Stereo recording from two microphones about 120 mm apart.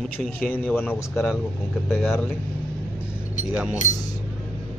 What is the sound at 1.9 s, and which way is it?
Speech, centre (ahead or behind).